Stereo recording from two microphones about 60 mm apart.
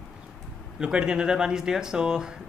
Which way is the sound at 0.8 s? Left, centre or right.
Centre.